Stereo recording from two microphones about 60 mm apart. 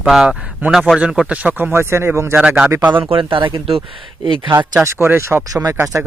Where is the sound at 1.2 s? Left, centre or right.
Right.